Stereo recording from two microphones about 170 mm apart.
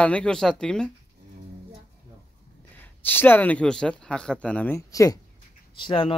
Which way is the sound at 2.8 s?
10° left (ahead or behind).